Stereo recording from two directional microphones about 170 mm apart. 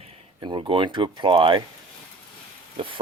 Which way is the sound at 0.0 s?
30° right (ahead or behind).